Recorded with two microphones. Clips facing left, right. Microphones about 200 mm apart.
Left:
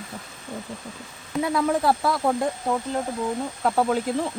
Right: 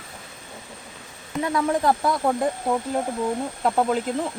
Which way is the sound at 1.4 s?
10° left (ahead or behind).